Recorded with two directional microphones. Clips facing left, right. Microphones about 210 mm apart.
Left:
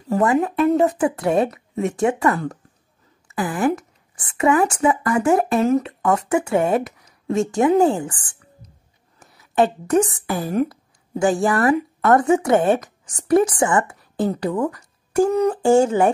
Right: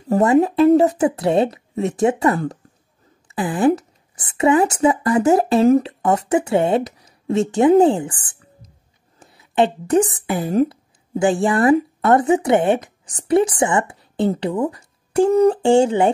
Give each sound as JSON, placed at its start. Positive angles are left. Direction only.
{"t": 0.1, "sound": "a woman's voice", "side_deg": -30}
{"t": 10.5, "sound": "a sound", "side_deg": -30}
{"t": 11.4, "sound": "a woman's voice", "side_deg": -25}